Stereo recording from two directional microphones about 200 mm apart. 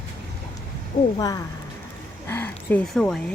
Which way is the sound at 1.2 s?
20° left (ahead or behind).